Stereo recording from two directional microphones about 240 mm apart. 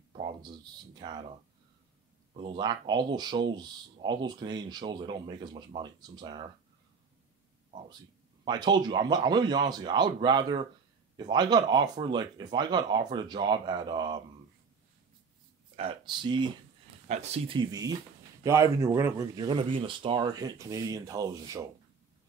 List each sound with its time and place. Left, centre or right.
0.4 s a sound: centre
2.3 s speech: centre
8.5 s speech: centre
15.7 s speech: right